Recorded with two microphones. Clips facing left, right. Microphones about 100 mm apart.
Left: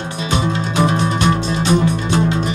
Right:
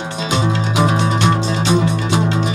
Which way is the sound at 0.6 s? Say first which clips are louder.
Even; 15° right (ahead or behind).